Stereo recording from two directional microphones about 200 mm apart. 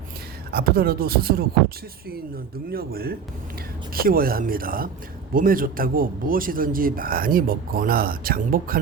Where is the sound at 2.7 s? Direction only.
50° right (ahead or behind).